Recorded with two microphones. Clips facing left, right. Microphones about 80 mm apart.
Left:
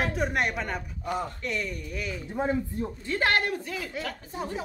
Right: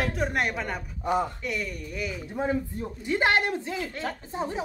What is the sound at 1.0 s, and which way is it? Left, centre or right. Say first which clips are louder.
Speech: right 5 dB; centre.